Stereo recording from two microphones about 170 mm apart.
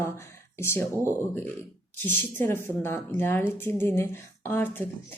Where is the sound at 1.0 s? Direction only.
10° left (ahead or behind).